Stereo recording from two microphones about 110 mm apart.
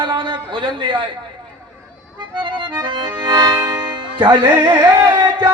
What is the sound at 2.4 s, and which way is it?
A man's voice, 45° right (ahead or behind).